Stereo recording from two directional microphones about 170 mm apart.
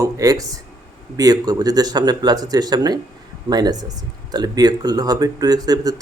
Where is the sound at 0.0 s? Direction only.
20° right (ahead or behind).